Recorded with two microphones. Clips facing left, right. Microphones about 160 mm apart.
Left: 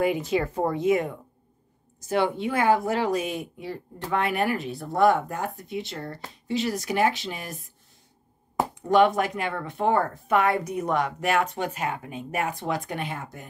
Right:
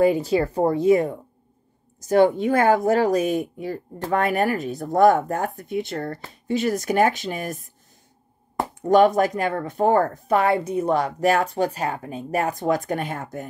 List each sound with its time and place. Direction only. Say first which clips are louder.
0.0 s speech: right 5 dB; 35° right (ahead or behind)
8.8 s speech: right 4 dB; 40° right (ahead or behind)